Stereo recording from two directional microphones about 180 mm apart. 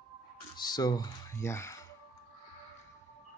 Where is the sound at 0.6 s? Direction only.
20° left (ahead or behind).